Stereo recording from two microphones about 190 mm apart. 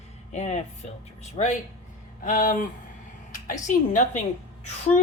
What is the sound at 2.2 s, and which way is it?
A woman's voice, 45° left (ahead or behind).